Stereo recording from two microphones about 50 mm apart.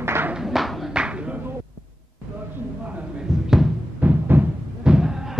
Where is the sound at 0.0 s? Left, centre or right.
Right.